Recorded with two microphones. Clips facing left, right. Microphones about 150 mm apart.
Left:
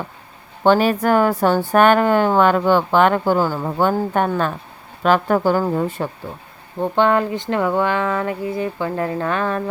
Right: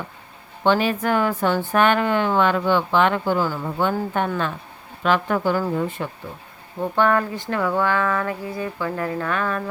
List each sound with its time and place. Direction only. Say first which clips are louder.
0.6 s a woman's voice: left 4 dB; 45° left (ahead or behind)
6.7 s speech: left 3 dB; 25° left (ahead or behind)